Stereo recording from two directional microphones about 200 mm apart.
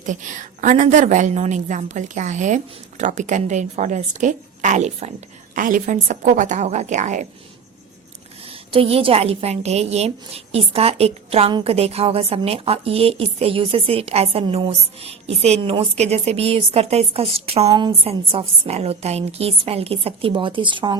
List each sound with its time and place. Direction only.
0.0 s a woman's voice: 40° right (ahead or behind)
8.4 s a woman's voice: 30° right (ahead or behind)